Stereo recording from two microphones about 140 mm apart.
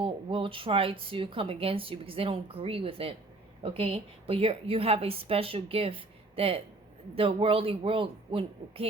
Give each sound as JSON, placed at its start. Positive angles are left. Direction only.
{"t": 0.0, "sound": "a woman's voice", "side_deg": -35}